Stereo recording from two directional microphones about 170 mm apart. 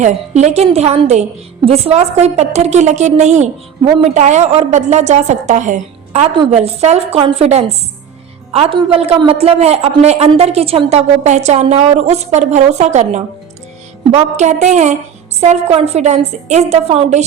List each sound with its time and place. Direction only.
0.0 s a woman's voice: 40° right (ahead or behind)